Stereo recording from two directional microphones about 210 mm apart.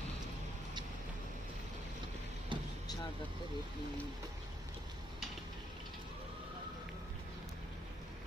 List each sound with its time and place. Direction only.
2.5 s vehicle: 25° right (ahead or behind)